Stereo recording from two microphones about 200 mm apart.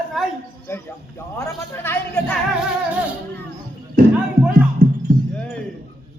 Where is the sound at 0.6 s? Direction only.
10° left (ahead or behind).